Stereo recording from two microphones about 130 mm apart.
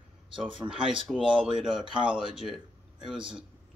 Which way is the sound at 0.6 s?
25° right (ahead or behind).